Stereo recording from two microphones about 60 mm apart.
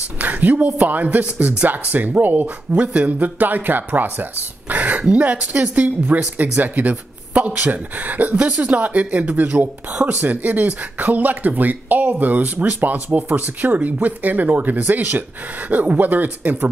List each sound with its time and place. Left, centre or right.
0.2 s speech: right